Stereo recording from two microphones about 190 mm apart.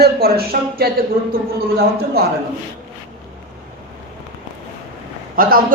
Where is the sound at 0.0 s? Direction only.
55° right (ahead or behind).